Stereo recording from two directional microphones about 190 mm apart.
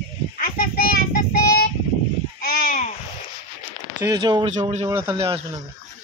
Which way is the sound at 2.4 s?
50° left (ahead or behind).